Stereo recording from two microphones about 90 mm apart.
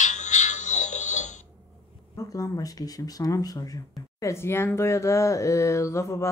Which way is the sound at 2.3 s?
40° left (ahead or behind).